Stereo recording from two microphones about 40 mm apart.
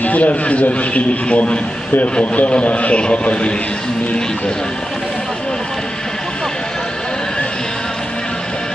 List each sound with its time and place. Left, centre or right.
0.0 s a man's voice: left